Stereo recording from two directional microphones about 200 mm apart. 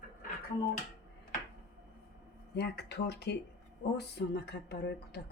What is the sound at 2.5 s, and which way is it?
Speech, 55° left (ahead or behind).